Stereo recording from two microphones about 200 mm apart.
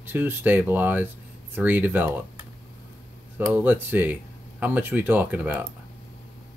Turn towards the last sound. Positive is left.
turn(degrees=-10)  # may be behind; listen again after turning